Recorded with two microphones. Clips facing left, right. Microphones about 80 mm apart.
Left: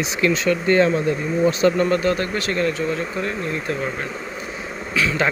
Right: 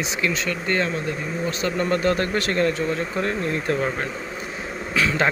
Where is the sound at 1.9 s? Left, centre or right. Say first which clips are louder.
Left 1 dB; right.